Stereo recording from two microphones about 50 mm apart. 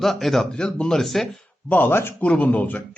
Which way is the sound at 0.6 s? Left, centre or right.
Centre.